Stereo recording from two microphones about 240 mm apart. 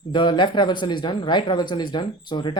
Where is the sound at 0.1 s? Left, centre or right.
Centre.